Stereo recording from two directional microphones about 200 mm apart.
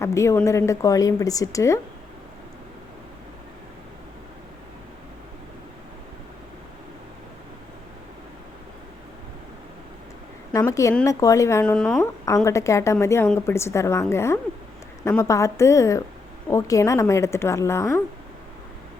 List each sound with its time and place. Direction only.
0.0 s a woman's voice: 15° left (ahead or behind)
10.5 s a woman's voice: 15° left (ahead or behind)